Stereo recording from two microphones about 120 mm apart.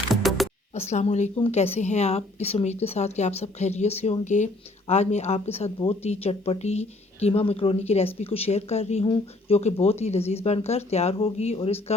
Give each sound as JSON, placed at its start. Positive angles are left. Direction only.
{"t": 0.1, "sound": "music", "side_deg": 0}
{"t": 0.7, "sound": "speech", "side_deg": 70}
{"t": 1.5, "sound": "speech", "side_deg": 60}
{"t": 4.9, "sound": "speech", "side_deg": 65}